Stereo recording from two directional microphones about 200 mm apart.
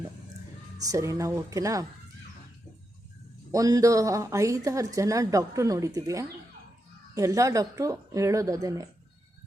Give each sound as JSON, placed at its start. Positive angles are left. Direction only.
{"t": 0.8, "sound": "a woman's voice", "side_deg": -15}
{"t": 3.5, "sound": "a woman's voice", "side_deg": -15}